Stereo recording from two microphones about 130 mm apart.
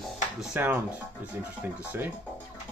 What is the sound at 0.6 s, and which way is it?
Speech, 15° right (ahead or behind).